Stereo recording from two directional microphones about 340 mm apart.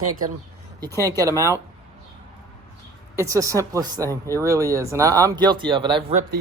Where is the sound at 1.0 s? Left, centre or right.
Centre.